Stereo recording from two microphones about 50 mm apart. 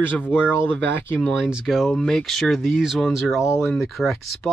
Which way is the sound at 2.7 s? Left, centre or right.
Centre.